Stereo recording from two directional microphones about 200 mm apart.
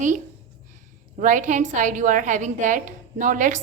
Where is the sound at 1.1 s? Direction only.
40° right (ahead or behind).